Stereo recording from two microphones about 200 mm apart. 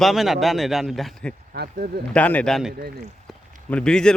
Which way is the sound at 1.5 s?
45° right (ahead or behind).